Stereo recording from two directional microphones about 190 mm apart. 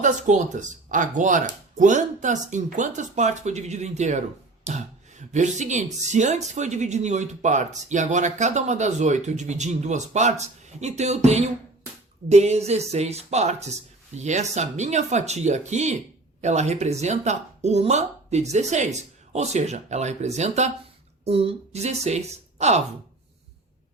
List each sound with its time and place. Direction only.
0.0 s a woman's voice: 40° right (ahead or behind)